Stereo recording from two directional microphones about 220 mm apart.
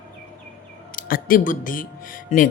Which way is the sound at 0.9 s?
40° left (ahead or behind).